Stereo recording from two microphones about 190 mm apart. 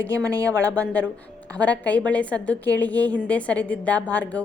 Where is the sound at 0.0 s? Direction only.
10° left (ahead or behind).